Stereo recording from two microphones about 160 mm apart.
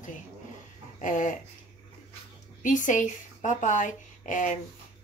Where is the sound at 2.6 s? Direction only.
55° left (ahead or behind).